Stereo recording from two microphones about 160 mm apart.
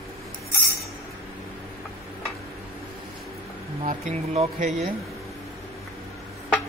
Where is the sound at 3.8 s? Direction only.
45° right (ahead or behind).